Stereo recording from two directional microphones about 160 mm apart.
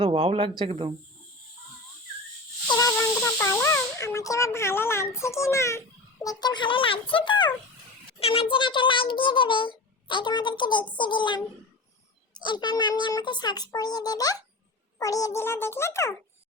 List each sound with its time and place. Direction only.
0.0 s speech: 35° right (ahead or behind)
2.6 s hiss: 20° left (ahead or behind)
6.2 s a child's voice: 25° left (ahead or behind)